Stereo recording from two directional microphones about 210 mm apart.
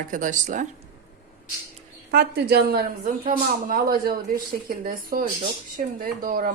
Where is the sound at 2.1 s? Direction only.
50° right (ahead or behind).